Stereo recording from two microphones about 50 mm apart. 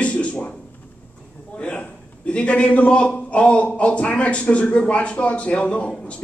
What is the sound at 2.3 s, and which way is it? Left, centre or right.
A man's voice, left.